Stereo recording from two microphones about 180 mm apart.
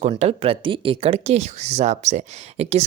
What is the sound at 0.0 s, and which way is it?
Speech, 35° right (ahead or behind).